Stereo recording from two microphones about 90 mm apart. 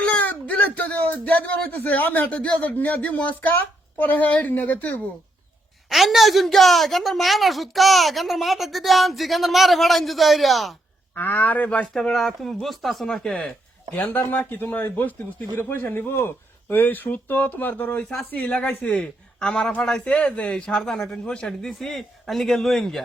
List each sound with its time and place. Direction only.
0.0 s speech: 15° left (ahead or behind)
5.9 s a woman's voice: centre (ahead or behind)
11.1 s a man's voice: 20° left (ahead or behind)
11.9 s a woman's voice: 5° left (ahead or behind)